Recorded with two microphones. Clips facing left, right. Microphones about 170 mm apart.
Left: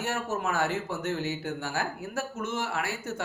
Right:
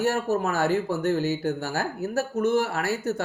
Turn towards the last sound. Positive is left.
turn(degrees=-40)  # may be behind; listen again after turning